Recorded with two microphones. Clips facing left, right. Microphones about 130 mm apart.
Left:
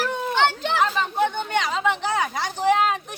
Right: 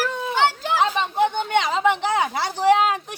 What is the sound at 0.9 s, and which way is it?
Speech, 20° right (ahead or behind).